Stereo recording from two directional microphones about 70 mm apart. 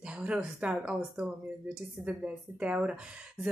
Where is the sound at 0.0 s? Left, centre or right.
Centre.